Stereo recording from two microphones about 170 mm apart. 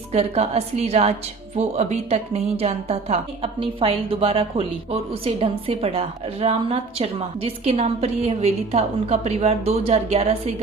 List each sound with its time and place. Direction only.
0.1 s a woman's voice: 40° right (ahead or behind)